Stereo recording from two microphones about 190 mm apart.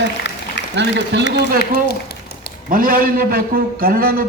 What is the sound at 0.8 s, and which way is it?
Speech, 65° right (ahead or behind).